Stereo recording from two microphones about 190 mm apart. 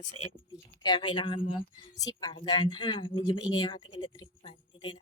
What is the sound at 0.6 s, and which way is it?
Speech, 20° left (ahead or behind).